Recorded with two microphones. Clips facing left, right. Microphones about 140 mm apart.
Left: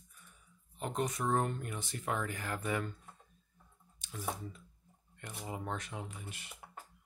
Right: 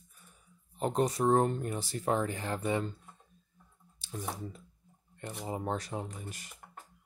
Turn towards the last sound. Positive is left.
turn(degrees=-40)  # may be behind; listen again after turning